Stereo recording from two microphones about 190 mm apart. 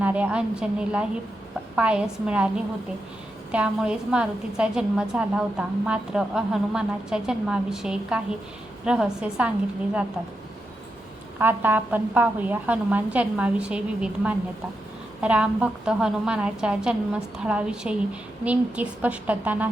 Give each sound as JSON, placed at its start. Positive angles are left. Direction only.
{"t": 0.0, "sound": "a woman's voice", "side_deg": -5}
{"t": 3.5, "sound": "a woman's voice", "side_deg": -5}
{"t": 11.3, "sound": "a woman's voice", "side_deg": -10}